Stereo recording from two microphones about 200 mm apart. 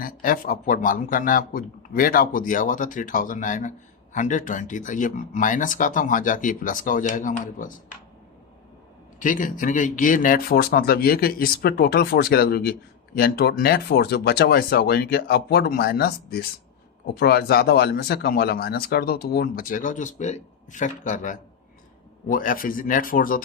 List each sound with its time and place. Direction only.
0.0 s speech: 45° left (ahead or behind)
9.1 s speech: 40° left (ahead or behind)